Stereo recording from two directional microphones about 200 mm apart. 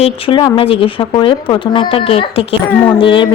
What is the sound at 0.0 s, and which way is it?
A woman's voice, 25° left (ahead or behind).